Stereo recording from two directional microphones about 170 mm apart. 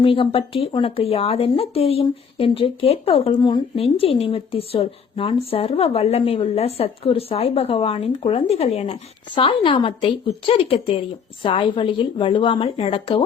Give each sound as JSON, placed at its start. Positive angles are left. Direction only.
{"t": 0.0, "sound": "a woman's voice", "side_deg": 30}